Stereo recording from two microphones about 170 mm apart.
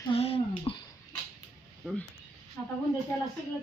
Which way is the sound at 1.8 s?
Centre (ahead or behind).